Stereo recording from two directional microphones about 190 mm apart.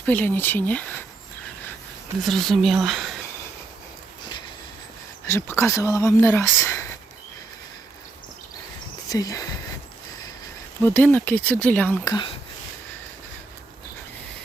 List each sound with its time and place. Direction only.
0.0 s speech: 10° left (ahead or behind)
2.2 s a woman's voice: centre (ahead or behind)
5.2 s speech: 15° left (ahead or behind)
9.0 s speech: 20° left (ahead or behind)
10.8 s speech: 10° left (ahead or behind)
12.1 s speech: 25° left (ahead or behind)